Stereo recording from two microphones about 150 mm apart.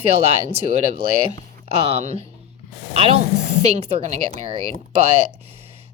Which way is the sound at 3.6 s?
45° right (ahead or behind).